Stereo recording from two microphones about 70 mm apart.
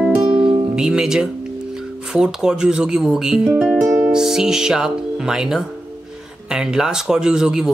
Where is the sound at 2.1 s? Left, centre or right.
Centre.